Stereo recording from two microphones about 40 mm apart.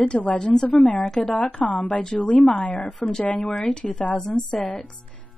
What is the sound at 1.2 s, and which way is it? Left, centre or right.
Speech, left.